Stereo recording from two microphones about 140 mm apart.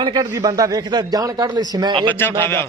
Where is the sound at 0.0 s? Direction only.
30° right (ahead or behind).